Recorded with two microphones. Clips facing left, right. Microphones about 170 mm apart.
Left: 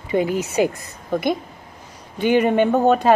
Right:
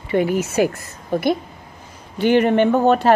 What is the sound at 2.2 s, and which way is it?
Speech, 10° left (ahead or behind).